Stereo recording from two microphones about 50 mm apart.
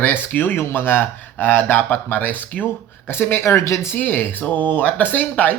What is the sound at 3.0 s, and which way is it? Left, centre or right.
Speech, left.